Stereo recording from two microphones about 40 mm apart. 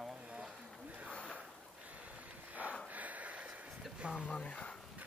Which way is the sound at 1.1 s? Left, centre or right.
Left.